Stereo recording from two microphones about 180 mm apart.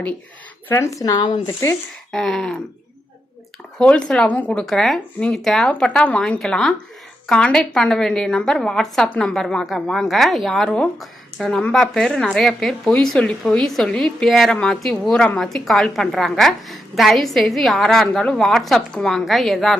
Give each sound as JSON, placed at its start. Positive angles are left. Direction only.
{"t": 0.7, "sound": "a woman's voice", "side_deg": 15}
{"t": 2.1, "sound": "a woman's voice", "side_deg": 0}
{"t": 3.8, "sound": "a woman's voice", "side_deg": 5}